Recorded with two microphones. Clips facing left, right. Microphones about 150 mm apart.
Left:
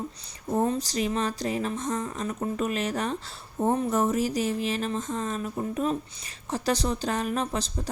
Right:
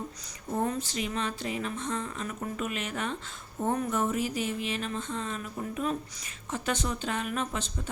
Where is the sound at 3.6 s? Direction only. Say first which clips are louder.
Left 4 dB; 25° left (ahead or behind).